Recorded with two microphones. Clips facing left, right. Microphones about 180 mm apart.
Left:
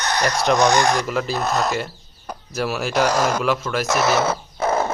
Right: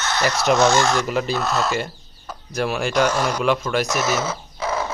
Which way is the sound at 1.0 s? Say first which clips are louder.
Right 1 dB; centre (ahead or behind).